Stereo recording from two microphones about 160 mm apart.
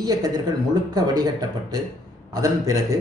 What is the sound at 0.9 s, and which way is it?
A man's voice, 25° right (ahead or behind).